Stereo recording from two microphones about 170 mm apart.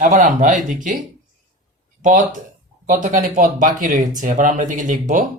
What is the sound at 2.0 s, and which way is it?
Speech, 50° right (ahead or behind).